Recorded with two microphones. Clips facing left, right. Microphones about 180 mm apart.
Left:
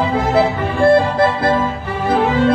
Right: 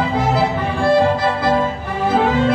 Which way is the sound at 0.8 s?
60° left (ahead or behind).